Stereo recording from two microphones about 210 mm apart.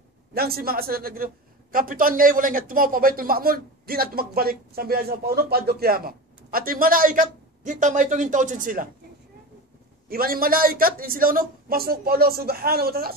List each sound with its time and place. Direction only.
0.3 s a man's voice: 45° right (ahead or behind)
10.0 s a man's voice: 45° right (ahead or behind)